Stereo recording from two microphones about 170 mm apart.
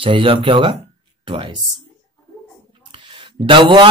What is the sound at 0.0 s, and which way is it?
Speech, 30° right (ahead or behind).